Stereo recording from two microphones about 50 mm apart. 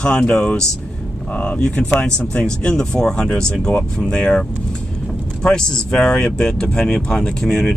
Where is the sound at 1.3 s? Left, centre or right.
Left.